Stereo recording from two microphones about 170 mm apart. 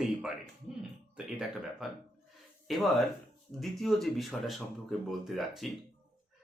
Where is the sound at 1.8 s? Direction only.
Centre (ahead or behind).